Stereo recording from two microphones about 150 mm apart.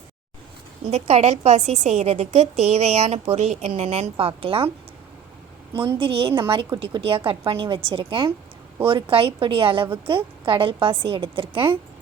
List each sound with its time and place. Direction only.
0.9 s a woman's voice: 45° right (ahead or behind)
6.0 s a woman's voice: 35° right (ahead or behind)